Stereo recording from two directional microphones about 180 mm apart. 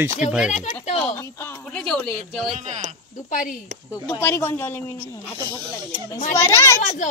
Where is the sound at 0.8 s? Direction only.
35° left (ahead or behind).